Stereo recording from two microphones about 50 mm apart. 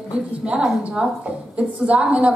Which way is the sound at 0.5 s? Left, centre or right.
Centre.